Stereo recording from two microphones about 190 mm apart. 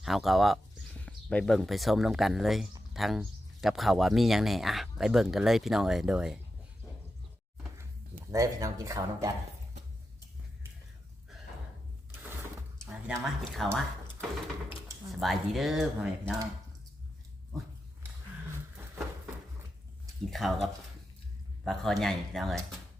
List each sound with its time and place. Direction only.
0.0 s speech: centre (ahead or behind)
8.3 s speech: 15° right (ahead or behind)
13.2 s speech: centre (ahead or behind)
15.1 s speech: centre (ahead or behind)
20.3 s speech: centre (ahead or behind)